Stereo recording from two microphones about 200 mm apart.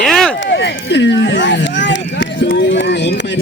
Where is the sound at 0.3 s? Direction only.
60° left (ahead or behind).